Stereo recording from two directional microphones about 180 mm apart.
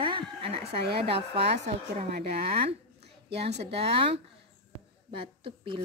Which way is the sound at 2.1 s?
65° right (ahead or behind).